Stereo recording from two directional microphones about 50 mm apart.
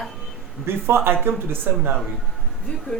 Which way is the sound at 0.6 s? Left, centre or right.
Right.